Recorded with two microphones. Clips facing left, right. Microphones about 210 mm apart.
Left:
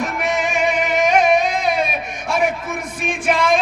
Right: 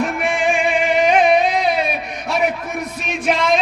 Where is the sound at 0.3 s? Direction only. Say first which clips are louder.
Even; 40° left (ahead or behind).